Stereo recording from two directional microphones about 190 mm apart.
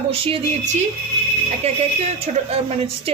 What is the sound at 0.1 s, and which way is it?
A woman's voice, 30° right (ahead or behind).